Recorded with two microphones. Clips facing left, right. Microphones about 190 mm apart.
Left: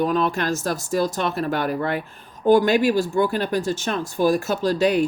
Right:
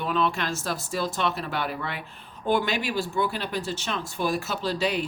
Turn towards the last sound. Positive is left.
turn(degrees=45)  # may be behind; listen again after turning